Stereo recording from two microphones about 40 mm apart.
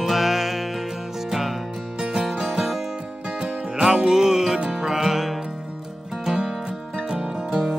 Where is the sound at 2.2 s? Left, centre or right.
Centre.